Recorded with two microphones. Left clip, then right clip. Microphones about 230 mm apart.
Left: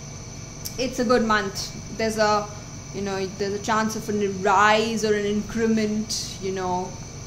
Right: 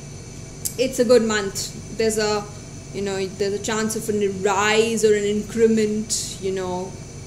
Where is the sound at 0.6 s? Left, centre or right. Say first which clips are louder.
Right 6 dB; left.